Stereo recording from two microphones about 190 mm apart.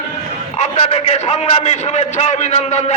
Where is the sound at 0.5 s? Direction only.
35° left (ahead or behind).